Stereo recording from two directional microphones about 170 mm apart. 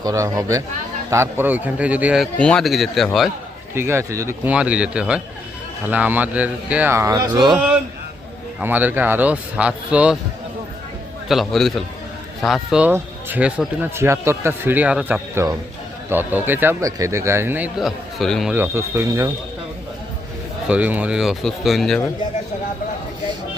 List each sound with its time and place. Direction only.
0.0 s a man's voice: 20° right (ahead or behind); by 3.3 s centre (ahead or behind)
3.8 s speech: 15° right (ahead or behind)
7.5 s a man's voice: 5° right (ahead or behind)
11.3 s a man's voice: centre (ahead or behind)
18.5 s speech: 15° right (ahead or behind)
20.7 s a man's voice: 10° right (ahead or behind)